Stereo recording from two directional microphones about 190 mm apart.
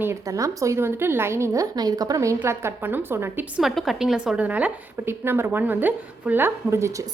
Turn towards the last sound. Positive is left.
turn(degrees=-15)  # may be behind; listen again after turning